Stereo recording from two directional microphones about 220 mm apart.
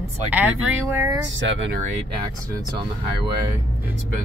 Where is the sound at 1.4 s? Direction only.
55° right (ahead or behind).